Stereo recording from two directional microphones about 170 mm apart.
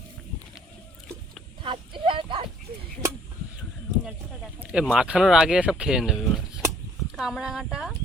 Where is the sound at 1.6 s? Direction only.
30° right (ahead or behind).